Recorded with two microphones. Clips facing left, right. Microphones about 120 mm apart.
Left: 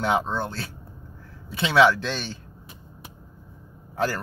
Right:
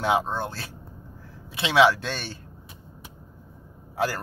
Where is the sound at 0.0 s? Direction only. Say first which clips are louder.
Even; 10° right (ahead or behind).